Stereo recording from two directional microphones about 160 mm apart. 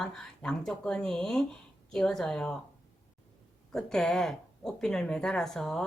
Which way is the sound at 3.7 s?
5° left (ahead or behind).